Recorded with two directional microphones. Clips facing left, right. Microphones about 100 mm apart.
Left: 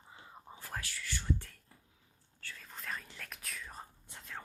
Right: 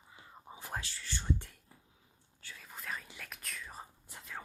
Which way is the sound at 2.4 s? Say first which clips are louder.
Even; 10° right (ahead or behind).